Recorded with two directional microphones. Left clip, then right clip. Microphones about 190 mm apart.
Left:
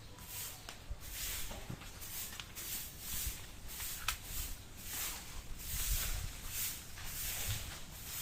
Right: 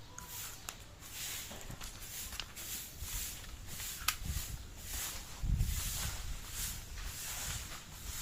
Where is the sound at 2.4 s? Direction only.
75° right (ahead or behind).